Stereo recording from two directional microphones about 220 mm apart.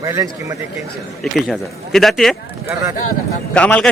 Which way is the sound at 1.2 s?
Centre (ahead or behind).